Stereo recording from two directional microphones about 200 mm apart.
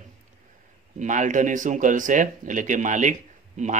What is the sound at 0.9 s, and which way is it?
Speech, 40° right (ahead or behind).